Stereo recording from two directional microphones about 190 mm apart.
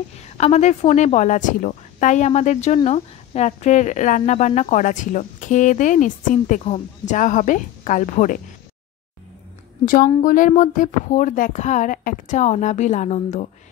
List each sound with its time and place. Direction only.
0.2 s speech: 35° left (ahead or behind)
10.2 s speech: 45° left (ahead or behind)